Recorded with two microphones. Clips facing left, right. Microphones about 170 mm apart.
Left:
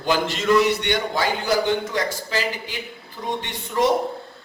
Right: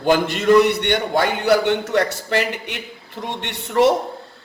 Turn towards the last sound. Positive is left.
turn(degrees=-65)  # may be behind; listen again after turning